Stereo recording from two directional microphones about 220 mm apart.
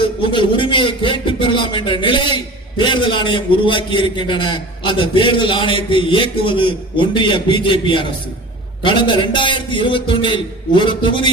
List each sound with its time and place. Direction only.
0.0 s a man's voice: 20° left (ahead or behind)